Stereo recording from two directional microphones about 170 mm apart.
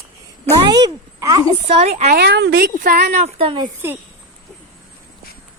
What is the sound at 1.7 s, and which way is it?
Speech, 35° right (ahead or behind).